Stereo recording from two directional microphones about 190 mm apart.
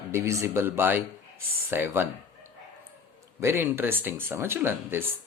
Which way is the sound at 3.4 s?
15° right (ahead or behind).